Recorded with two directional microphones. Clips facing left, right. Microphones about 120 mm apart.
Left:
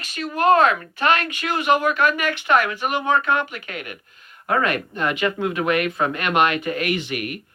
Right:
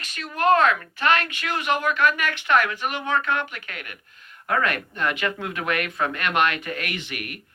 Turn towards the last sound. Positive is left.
turn(degrees=15)  # may be behind; listen again after turning